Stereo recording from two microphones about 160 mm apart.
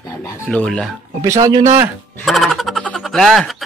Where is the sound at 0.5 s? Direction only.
5° left (ahead or behind).